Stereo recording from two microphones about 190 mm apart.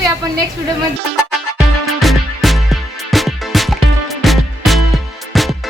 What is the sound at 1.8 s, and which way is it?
Music, centre (ahead or behind).